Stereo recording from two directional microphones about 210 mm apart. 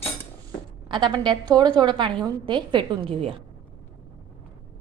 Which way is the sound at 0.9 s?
20° right (ahead or behind).